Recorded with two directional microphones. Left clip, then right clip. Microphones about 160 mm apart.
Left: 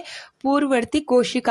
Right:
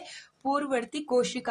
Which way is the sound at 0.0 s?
35° left (ahead or behind).